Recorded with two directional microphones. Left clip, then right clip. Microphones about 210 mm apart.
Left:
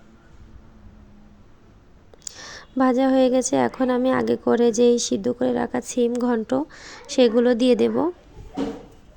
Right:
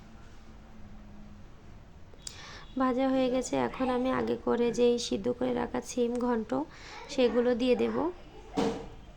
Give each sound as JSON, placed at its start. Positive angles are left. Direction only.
{"t": 2.2, "sound": "a woman's voice", "side_deg": 30}